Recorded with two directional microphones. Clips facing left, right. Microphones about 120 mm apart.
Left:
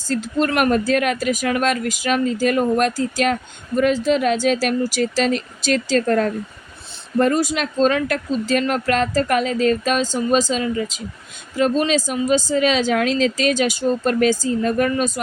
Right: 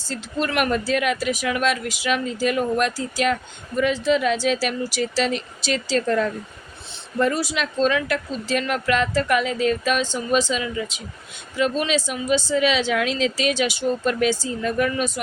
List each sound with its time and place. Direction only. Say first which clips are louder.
0.1 s speech: left 5 dB; 45° left (ahead or behind)